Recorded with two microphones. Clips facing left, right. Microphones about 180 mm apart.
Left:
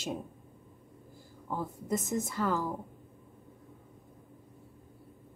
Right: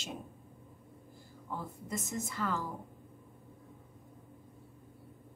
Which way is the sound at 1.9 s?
45° left (ahead or behind).